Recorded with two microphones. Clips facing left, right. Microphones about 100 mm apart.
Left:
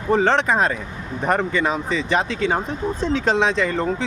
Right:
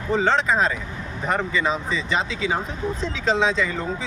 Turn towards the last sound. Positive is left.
turn(degrees=60)  # may be behind; listen again after turning